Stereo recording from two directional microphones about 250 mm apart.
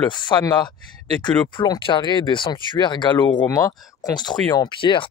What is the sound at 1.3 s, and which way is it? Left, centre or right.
Speech, centre.